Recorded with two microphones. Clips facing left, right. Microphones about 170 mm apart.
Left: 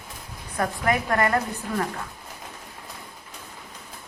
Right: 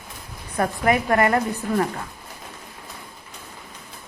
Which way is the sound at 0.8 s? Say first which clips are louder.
Right 4 dB; 15° right (ahead or behind).